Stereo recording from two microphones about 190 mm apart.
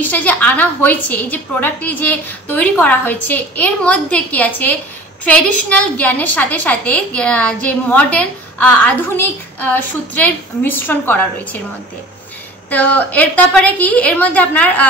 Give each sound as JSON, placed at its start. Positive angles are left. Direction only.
{"t": 0.0, "sound": "a woman's voice", "side_deg": 10}
{"t": 12.6, "sound": "a woman's voice", "side_deg": 10}